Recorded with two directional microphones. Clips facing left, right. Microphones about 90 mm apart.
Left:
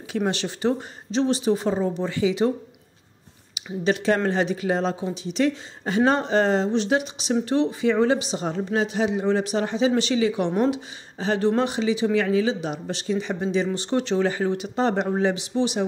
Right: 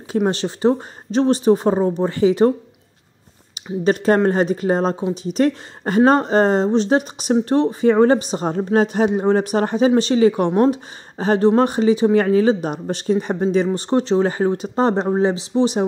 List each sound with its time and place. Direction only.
0.3 s speech: 35° right (ahead or behind)
3.5 s speech: 40° right (ahead or behind)